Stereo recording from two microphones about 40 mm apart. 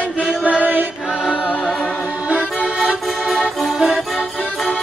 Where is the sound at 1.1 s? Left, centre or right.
Right.